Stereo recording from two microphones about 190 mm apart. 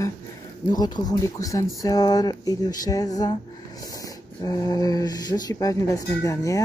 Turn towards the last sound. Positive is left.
turn(degrees=15)  # may be behind; listen again after turning